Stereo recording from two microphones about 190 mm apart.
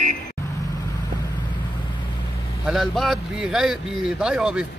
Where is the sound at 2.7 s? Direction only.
Centre (ahead or behind).